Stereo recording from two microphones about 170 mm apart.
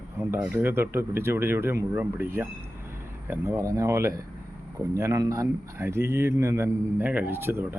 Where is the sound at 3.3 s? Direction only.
15° right (ahead or behind).